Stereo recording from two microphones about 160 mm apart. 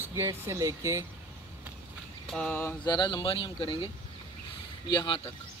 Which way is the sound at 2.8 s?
25° left (ahead or behind).